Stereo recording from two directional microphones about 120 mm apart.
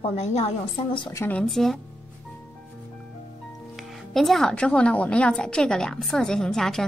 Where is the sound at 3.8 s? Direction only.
Centre (ahead or behind).